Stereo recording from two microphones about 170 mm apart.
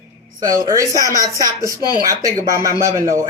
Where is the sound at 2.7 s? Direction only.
15° right (ahead or behind).